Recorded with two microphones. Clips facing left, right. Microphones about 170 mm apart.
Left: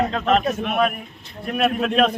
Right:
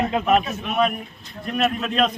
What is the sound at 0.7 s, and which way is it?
A man's voice, 5° left (ahead or behind).